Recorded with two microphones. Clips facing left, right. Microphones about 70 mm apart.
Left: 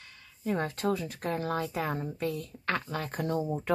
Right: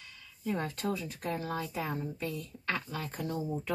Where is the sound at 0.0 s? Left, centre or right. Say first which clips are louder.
Left 2 dB; left.